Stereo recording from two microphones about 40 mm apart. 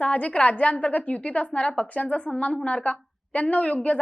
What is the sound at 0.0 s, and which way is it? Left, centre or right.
A woman's voice, left.